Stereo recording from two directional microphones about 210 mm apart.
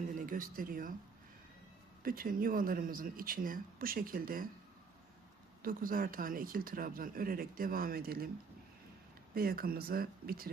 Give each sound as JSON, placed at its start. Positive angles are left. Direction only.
{"t": 0.2, "sound": "speech", "side_deg": -40}
{"t": 2.0, "sound": "speech", "side_deg": -45}
{"t": 5.6, "sound": "speech", "side_deg": -45}
{"t": 9.3, "sound": "speech", "side_deg": -45}